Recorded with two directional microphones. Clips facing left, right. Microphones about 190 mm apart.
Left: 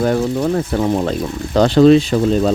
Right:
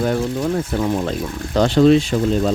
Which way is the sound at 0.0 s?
50° left (ahead or behind).